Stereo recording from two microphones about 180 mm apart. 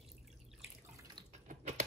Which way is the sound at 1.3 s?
40° right (ahead or behind).